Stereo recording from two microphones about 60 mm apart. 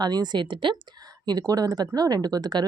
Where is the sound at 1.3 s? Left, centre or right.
Right.